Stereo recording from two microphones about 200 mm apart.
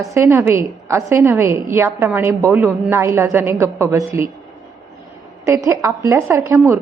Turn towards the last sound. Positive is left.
turn(degrees=-15)  # may be behind; listen again after turning